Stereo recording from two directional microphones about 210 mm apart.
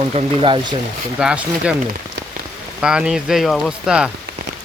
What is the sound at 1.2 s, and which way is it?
Speech, 5° right (ahead or behind).